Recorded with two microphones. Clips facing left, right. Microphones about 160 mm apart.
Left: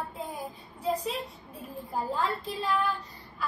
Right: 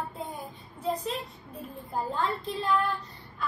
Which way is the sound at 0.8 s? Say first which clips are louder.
Left 1 dB; centre (ahead or behind).